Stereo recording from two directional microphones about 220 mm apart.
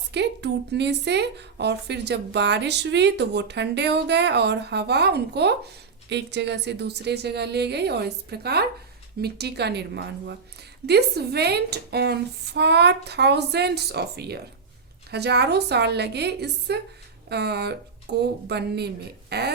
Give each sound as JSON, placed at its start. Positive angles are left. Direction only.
{"t": 0.1, "sound": "a woman's voice", "side_deg": -50}